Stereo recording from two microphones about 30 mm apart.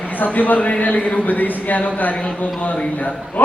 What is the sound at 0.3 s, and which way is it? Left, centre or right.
Speech, left.